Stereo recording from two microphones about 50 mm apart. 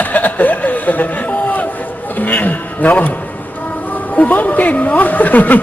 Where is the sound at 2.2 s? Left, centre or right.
Left.